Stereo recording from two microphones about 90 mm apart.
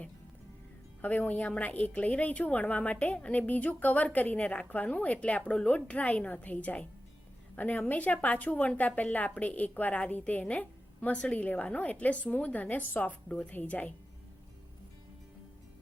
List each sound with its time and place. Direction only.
1.0 s a woman's voice: 20° left (ahead or behind)